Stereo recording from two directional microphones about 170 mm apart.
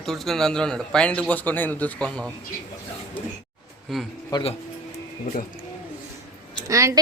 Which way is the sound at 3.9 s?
Centre (ahead or behind).